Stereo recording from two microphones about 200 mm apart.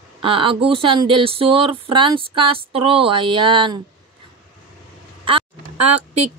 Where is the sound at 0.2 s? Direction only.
25° right (ahead or behind).